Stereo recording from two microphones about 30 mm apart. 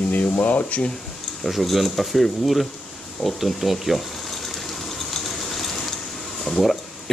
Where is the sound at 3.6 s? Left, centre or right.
Centre.